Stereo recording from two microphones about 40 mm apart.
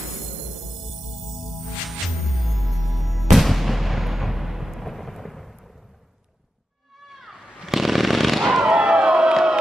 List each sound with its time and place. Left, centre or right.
2.4 s music: centre
7.1 s fireworks: centre
8.7 s slam: centre